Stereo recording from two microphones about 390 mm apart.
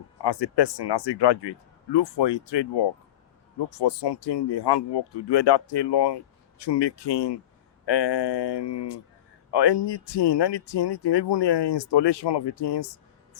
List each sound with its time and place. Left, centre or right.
0.2 s speech: left